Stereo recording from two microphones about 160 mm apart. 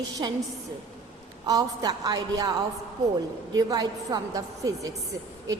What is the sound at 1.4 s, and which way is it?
A woman's voice, 25° right (ahead or behind).